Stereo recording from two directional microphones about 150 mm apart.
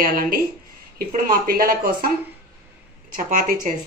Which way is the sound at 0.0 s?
70° right (ahead or behind).